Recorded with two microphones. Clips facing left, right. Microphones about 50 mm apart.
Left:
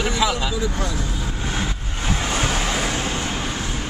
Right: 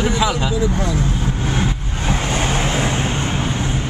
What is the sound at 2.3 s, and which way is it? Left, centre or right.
Vehicle, right.